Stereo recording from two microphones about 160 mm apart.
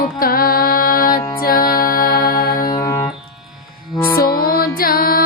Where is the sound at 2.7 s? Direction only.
20° left (ahead or behind).